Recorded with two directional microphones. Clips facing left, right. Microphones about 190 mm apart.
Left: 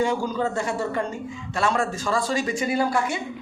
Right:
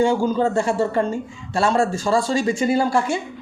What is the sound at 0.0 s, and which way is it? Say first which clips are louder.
Speech: right 6 dB; 30° right (ahead or behind).